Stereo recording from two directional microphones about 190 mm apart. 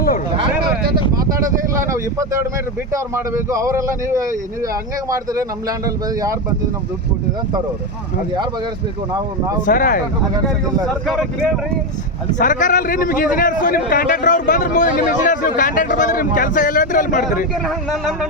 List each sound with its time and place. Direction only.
1.7 s speech: 15° right (ahead or behind)
9.6 s a man's voice: 45° left (ahead or behind)
11.0 s speech: centre (ahead or behind)
12.4 s a man's voice: 45° left (ahead or behind)
17.7 s speech: centre (ahead or behind)